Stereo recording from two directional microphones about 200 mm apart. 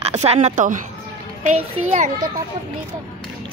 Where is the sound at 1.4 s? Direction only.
35° right (ahead or behind).